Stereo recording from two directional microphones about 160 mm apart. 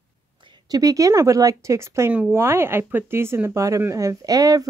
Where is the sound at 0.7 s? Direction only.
20° right (ahead or behind).